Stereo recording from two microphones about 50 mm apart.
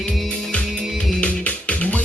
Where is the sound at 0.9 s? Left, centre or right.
Left.